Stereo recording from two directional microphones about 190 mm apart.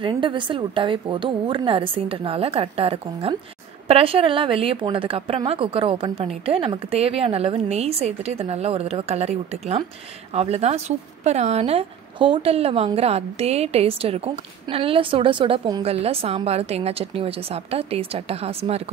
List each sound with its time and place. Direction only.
0.0 s a woman's voice: 25° right (ahead or behind)